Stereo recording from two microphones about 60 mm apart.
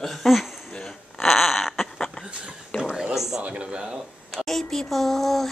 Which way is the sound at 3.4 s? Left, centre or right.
Centre.